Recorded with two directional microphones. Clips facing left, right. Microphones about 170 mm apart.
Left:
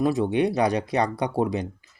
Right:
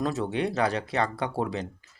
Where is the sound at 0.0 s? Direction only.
15° left (ahead or behind).